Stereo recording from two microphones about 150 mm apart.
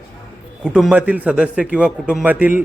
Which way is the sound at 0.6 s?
5° right (ahead or behind).